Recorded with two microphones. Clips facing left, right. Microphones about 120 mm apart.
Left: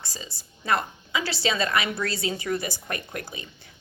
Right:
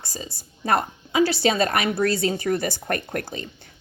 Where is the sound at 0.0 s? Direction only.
45° right (ahead or behind).